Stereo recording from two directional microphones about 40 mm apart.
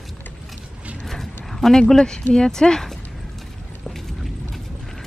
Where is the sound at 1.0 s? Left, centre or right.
Centre.